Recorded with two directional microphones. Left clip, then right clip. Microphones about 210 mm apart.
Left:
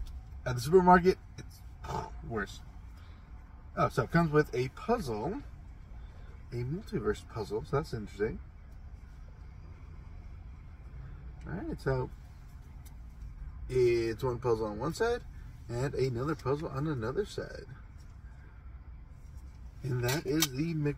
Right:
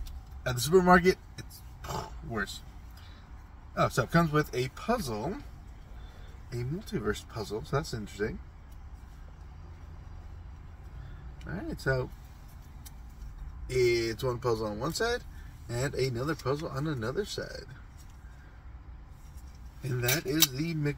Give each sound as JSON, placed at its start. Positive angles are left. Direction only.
{"t": 0.4, "sound": "speech", "side_deg": -15}
{"t": 1.9, "sound": "roar", "side_deg": -15}
{"t": 3.7, "sound": "speech", "side_deg": -15}
{"t": 6.5, "sound": "speech", "side_deg": -15}
{"t": 11.4, "sound": "speech", "side_deg": -15}
{"t": 14.2, "sound": "speech", "side_deg": -15}
{"t": 20.0, "sound": "speech", "side_deg": -15}